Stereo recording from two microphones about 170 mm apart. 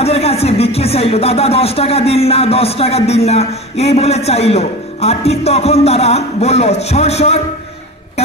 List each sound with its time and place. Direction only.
0.0 s speech: 35° left (ahead or behind)